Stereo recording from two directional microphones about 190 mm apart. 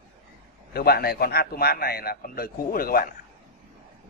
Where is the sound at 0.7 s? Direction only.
55° left (ahead or behind).